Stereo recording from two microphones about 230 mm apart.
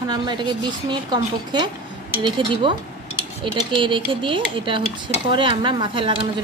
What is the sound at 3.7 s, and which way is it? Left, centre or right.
Speech, right.